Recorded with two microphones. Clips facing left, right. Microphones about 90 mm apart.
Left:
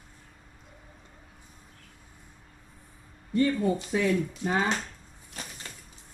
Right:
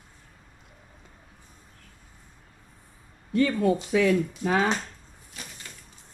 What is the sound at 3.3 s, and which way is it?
Speech, 90° right.